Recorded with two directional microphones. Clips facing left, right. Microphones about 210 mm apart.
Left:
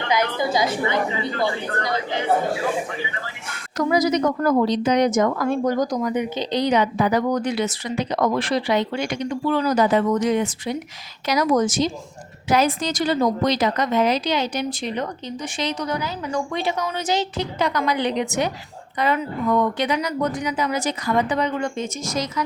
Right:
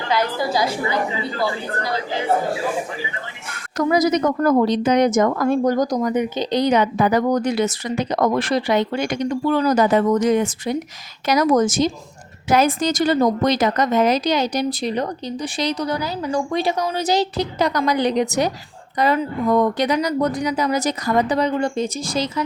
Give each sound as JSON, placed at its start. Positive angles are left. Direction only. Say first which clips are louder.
{"t": 3.8, "sound": "a woman's voice", "louder": "right 2 dB", "side_deg": -45}